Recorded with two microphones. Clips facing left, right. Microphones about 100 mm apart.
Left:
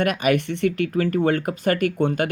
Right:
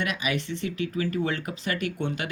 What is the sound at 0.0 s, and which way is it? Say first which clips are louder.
Speech: left 9 dB; 50° left (ahead or behind).